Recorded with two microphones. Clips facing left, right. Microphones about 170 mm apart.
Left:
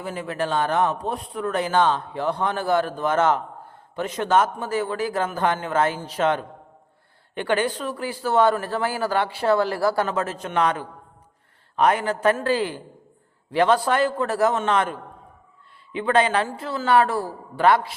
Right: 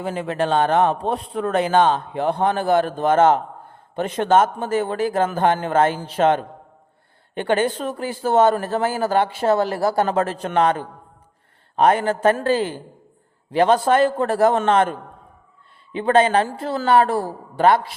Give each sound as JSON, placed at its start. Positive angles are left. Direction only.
{"t": 0.0, "sound": "a man's voice", "side_deg": -25}
{"t": 2.3, "sound": "a man's voice", "side_deg": -50}
{"t": 2.6, "sound": "a man's voice", "side_deg": -20}
{"t": 3.1, "sound": "a man's voice", "side_deg": -50}
{"t": 6.0, "sound": "a man's voice", "side_deg": -30}
{"t": 7.3, "sound": "a man's voice", "side_deg": -45}
{"t": 9.3, "sound": "a man's voice", "side_deg": -20}
{"t": 10.2, "sound": "speech", "side_deg": -35}
{"t": 11.8, "sound": "speech", "side_deg": -30}
{"t": 12.4, "sound": "a man's voice", "side_deg": -45}
{"t": 13.8, "sound": "a man's voice", "side_deg": -50}
{"t": 15.9, "sound": "a man's voice", "side_deg": -40}